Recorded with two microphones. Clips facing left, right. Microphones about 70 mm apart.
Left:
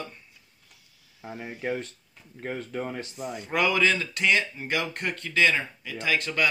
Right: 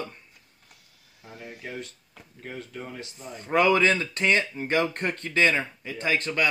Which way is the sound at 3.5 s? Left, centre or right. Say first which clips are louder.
Right 3 dB; right.